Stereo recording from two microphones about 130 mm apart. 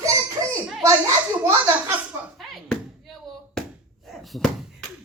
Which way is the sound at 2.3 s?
Centre (ahead or behind).